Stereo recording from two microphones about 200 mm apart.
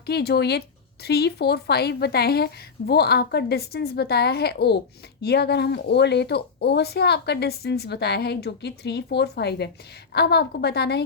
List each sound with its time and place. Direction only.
0.0 s a woman's voice: 50° left (ahead or behind)